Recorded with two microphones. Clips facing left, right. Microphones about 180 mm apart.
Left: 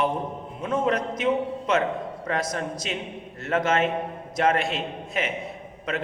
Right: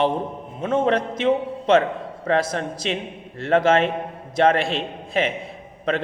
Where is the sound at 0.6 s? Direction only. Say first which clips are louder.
Right 4 dB; 25° right (ahead or behind).